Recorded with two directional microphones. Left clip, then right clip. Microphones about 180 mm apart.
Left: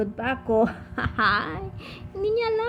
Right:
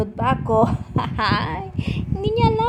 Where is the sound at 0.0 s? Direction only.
15° right (ahead or behind).